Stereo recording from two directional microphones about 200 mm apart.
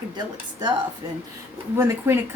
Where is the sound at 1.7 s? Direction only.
10° right (ahead or behind).